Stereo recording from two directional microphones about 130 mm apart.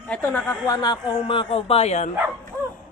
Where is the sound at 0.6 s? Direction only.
30° left (ahead or behind); by 2.1 s 60° left (ahead or behind).